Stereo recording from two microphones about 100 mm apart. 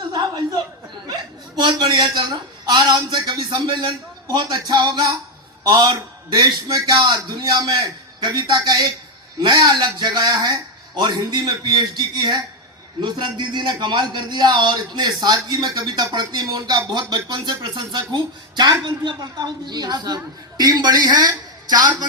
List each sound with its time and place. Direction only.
0.1 s chatter: 40° right (ahead or behind)
1.0 s a woman's voice: 45° right (ahead or behind)